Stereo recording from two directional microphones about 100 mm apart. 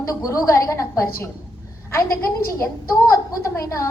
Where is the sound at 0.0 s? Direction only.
35° left (ahead or behind).